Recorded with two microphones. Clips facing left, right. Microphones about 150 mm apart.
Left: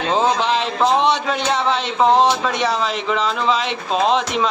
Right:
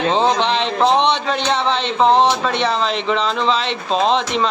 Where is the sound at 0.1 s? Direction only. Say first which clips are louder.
Left 3 dB; 5° left (ahead or behind).